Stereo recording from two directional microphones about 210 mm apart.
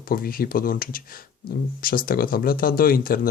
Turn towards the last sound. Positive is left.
turn(degrees=45)  # may be behind; listen again after turning